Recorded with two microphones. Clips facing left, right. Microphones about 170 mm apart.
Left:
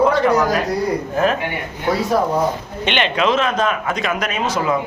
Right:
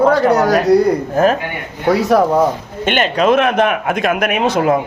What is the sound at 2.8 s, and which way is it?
Speech, 45° right (ahead or behind).